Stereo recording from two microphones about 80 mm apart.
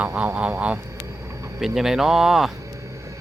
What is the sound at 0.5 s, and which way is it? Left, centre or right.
Speech, centre.